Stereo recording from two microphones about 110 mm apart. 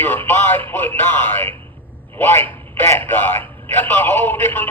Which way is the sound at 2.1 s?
20° left (ahead or behind).